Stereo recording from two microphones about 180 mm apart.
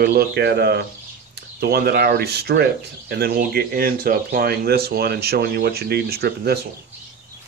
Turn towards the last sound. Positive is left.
turn(degrees=-60)  # may be behind; listen again after turning